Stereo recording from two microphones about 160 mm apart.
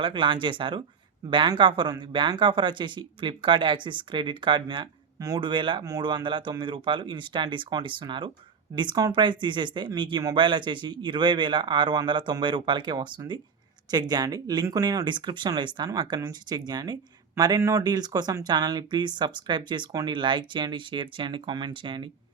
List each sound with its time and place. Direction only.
0.0 s speech: 30° right (ahead or behind)